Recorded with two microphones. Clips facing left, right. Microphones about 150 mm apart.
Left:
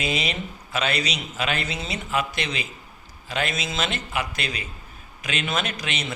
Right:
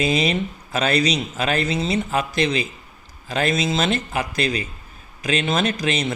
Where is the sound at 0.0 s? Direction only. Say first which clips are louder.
Right 7 dB; 40° right (ahead or behind).